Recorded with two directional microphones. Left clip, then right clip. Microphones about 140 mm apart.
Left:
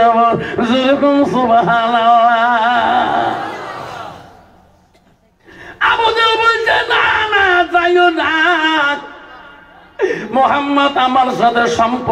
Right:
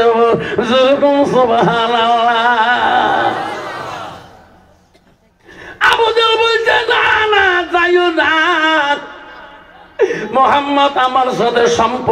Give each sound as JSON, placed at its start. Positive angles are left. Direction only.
{"t": 0.0, "sound": "a sound", "side_deg": -20}
{"t": 5.8, "sound": "battle cry", "side_deg": -25}
{"t": 9.9, "sound": "a man's voice", "side_deg": -25}